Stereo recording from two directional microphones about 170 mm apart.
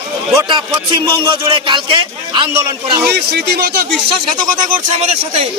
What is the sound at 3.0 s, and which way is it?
Speech, 75° right (ahead or behind).